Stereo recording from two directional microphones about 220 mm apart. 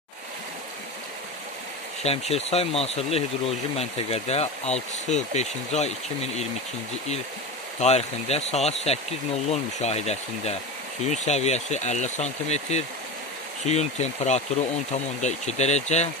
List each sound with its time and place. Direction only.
2.0 s speech: 30° left (ahead or behind)
7.8 s speech: 30° left (ahead or behind)